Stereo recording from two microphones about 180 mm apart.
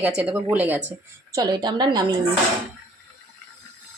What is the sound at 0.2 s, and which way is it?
Speech, 5° right (ahead or behind).